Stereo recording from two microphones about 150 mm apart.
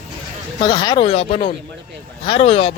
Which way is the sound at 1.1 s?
45° left (ahead or behind).